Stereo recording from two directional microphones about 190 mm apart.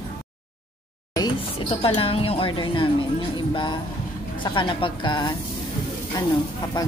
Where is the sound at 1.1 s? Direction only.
20° left (ahead or behind).